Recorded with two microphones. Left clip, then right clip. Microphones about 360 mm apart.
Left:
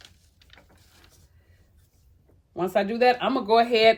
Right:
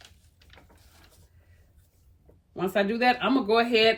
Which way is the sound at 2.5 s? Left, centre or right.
Centre.